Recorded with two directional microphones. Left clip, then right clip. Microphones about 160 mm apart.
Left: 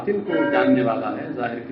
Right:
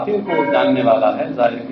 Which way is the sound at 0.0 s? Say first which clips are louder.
Right 4 dB; 35° right (ahead or behind).